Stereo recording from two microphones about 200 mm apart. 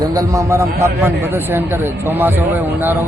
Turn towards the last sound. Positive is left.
turn(degrees=-10)  # may be behind; listen again after turning